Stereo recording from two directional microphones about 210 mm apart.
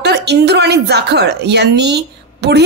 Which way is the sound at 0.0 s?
55° right (ahead or behind).